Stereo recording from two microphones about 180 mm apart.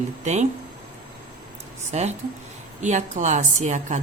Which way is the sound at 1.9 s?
40° right (ahead or behind).